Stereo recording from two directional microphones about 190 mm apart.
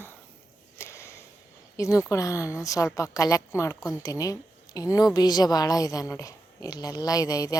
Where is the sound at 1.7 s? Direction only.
15° left (ahead or behind).